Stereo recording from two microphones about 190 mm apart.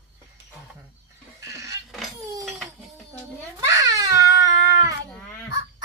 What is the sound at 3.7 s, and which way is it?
Babbling, 20° right (ahead or behind).